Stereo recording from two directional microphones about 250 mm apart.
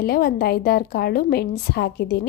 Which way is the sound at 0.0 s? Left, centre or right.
Left.